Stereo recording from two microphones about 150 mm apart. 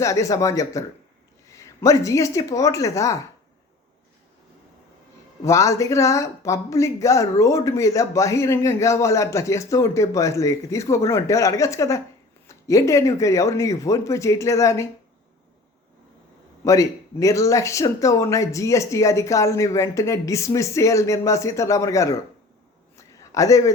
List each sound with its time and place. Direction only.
0.0 s speech: 20° left (ahead or behind)
5.5 s speech: 20° left (ahead or behind)
16.6 s speech: 20° left (ahead or behind)
23.0 s a sound: 20° left (ahead or behind)